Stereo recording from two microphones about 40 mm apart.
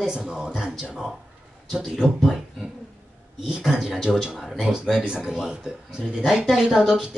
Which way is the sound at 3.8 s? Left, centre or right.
Centre.